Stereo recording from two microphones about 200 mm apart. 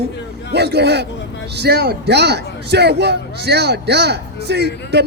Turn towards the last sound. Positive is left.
turn(degrees=-55)  # may be behind; listen again after turning